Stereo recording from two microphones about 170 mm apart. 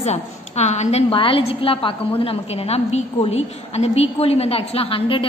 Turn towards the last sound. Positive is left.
turn(degrees=35)  # may be behind; listen again after turning